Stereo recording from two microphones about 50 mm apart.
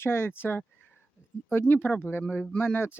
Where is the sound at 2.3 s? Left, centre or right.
Left.